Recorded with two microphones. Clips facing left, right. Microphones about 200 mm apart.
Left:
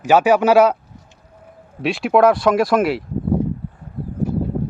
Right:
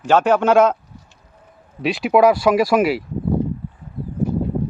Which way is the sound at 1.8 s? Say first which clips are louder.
Even; centre (ahead or behind).